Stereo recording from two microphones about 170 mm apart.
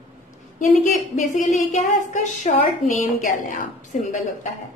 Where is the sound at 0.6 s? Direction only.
45° left (ahead or behind).